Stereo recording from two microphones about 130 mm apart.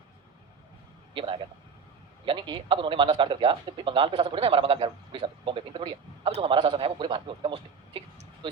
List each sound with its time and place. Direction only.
1.1 s a man's voice: 40° right (ahead or behind)